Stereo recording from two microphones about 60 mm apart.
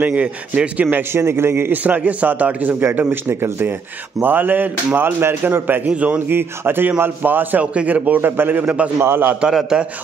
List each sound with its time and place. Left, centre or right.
0.0 s a man's voice: right
0.7 s a man's voice: right
1.7 s a man's voice: right
9.4 s a man's voice: centre